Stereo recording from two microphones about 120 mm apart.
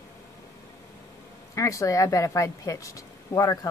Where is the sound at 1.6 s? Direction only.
25° left (ahead or behind).